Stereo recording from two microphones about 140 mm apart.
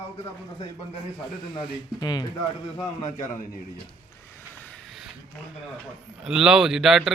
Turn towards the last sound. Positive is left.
turn(degrees=-5)  # may be behind; listen again after turning